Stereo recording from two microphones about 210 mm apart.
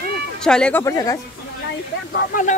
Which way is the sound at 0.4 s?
5° left (ahead or behind).